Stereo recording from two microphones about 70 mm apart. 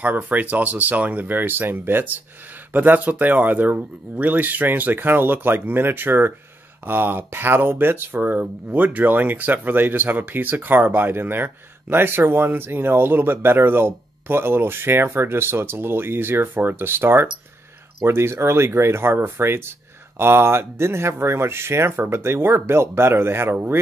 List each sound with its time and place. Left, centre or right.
0.0 s speech: right